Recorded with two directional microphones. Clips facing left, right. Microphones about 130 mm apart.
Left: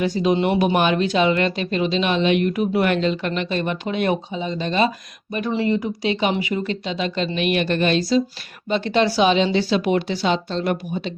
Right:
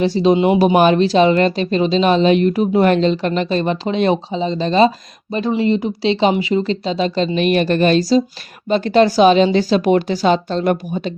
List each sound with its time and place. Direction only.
0.0 s speech: 30° right (ahead or behind)
5.5 s speech: 20° right (ahead or behind); by 11.1 s 45° right (ahead or behind)